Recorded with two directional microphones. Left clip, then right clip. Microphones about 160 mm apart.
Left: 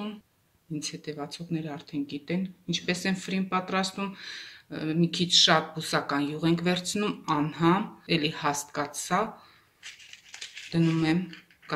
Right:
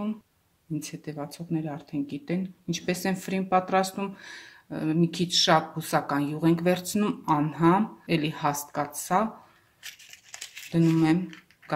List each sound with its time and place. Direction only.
0.7 s speech: 65° right (ahead or behind)
10.1 s crumpling: 60° right (ahead or behind)